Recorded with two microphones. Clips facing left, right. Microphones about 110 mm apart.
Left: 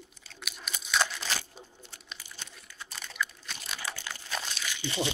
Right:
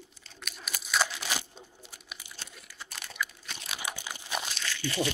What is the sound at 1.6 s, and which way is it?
Crumpling, 5° right (ahead or behind).